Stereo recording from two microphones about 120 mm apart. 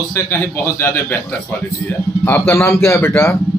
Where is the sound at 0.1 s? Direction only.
20° left (ahead or behind).